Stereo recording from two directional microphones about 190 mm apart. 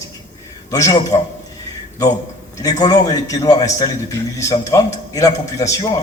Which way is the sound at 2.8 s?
20° left (ahead or behind).